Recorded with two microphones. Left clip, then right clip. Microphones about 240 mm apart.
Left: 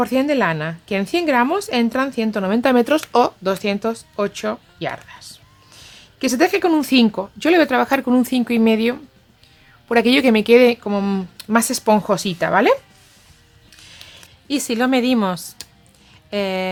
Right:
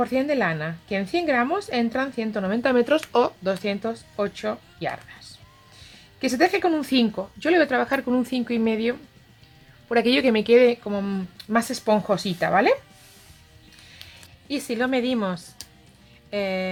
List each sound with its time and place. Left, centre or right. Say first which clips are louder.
0.0 s a woman's voice: left 5 dB; left
14.4 s a woman's voice: left 6 dB; left